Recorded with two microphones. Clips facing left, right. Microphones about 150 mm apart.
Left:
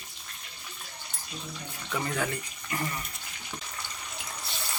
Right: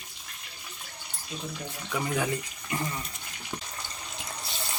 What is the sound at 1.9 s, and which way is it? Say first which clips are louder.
Speech: right 2 dB; 5° right (ahead or behind).